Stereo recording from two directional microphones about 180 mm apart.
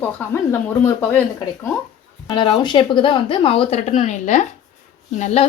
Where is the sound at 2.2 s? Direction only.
25° left (ahead or behind).